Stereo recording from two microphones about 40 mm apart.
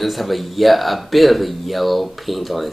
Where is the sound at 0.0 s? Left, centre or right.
Centre.